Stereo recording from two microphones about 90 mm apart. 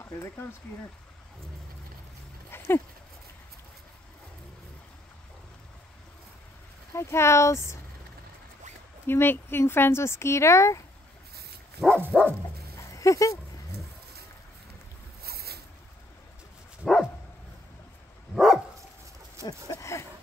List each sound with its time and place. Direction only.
0.0 s speech: 25° left (ahead or behind)
2.5 s dog: 25° left (ahead or behind)
6.9 s speech: 30° left (ahead or behind)
9.0 s speech: 25° left (ahead or behind)
12.0 s dog: 20° right (ahead or behind)
12.7 s dog: 35° left (ahead or behind)
16.8 s dog: centre (ahead or behind)
18.3 s dog: centre (ahead or behind)
19.4 s a sound: 35° left (ahead or behind)